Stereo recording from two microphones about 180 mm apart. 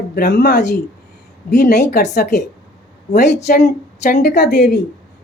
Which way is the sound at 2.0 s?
40° left (ahead or behind).